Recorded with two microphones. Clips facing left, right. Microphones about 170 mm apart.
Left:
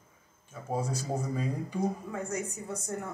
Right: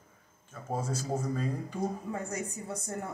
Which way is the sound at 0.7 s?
10° left (ahead or behind).